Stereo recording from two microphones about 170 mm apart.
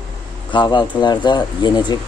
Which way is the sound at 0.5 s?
30° left (ahead or behind).